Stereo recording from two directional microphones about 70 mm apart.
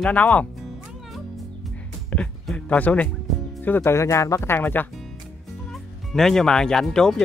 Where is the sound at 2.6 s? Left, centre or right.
Left.